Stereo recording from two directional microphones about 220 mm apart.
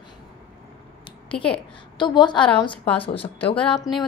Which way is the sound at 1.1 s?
25° left (ahead or behind).